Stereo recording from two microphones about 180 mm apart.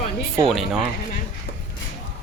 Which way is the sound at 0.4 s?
Centre (ahead or behind).